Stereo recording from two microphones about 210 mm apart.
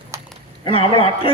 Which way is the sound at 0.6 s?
25° left (ahead or behind).